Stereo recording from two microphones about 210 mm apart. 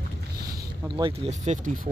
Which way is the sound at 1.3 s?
35° right (ahead or behind).